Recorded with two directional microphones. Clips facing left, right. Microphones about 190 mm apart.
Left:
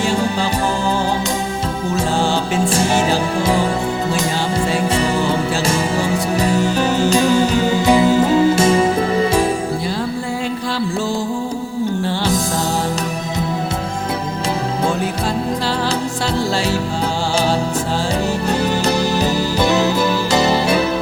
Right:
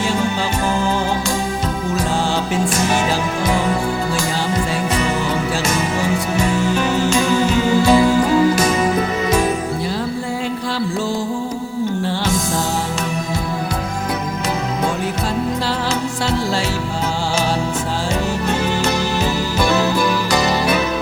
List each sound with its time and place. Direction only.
2.6 s music: 30° left (ahead or behind)
6.4 s music: 35° left (ahead or behind)
7.8 s music: 20° left (ahead or behind)
18.6 s music: 35° left (ahead or behind)
19.5 s music: 20° left (ahead or behind)